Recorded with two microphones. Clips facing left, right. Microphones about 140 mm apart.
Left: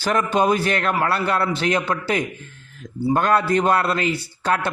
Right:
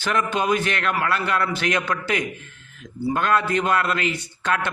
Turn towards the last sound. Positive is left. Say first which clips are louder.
# left 3 dB
turn(degrees=35)  # may be behind; listen again after turning